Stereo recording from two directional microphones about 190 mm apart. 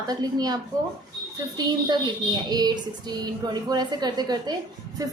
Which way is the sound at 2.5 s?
20° right (ahead or behind).